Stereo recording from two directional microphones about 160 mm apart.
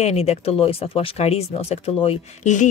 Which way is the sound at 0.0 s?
40° left (ahead or behind).